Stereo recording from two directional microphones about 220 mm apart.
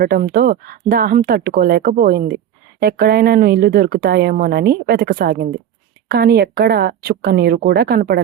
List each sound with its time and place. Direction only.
0.0 s speech: 45° right (ahead or behind)